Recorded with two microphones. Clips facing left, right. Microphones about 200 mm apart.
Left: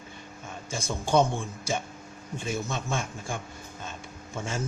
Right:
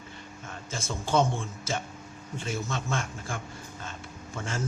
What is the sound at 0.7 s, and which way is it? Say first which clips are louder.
A man's voice: left 3 dB; 15° left (ahead or behind).